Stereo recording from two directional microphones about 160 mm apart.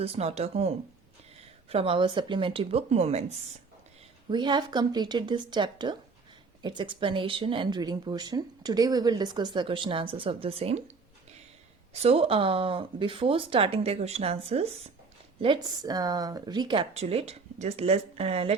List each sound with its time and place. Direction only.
0.0 s speech: 40° right (ahead or behind)
1.7 s speech: 35° right (ahead or behind)
4.3 s speech: 30° right (ahead or behind)
11.9 s speech: 40° right (ahead or behind)
15.4 s speech: 25° right (ahead or behind)
16.9 s speech: 40° right (ahead or behind)